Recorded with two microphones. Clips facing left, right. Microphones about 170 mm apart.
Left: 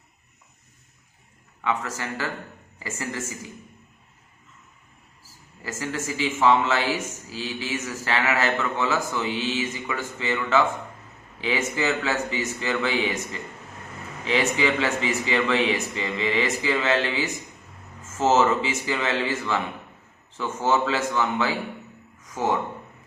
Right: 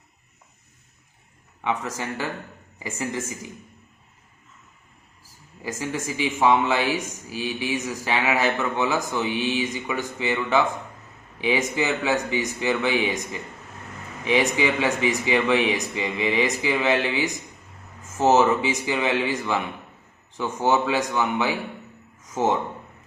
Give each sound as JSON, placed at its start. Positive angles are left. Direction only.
{"t": 1.6, "sound": "speech", "side_deg": -20}
{"t": 5.6, "sound": "speech", "side_deg": -15}